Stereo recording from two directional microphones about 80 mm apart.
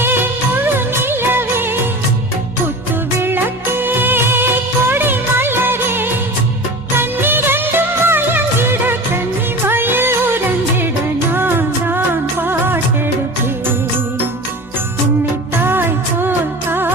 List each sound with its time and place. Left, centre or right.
0.0 s music of bollywood: right
3.2 s music of bollywood: right
9.6 s music: right
15.6 s music: right